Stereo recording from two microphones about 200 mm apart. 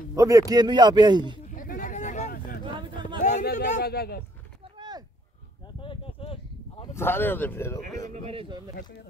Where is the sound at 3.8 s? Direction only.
50° left (ahead or behind).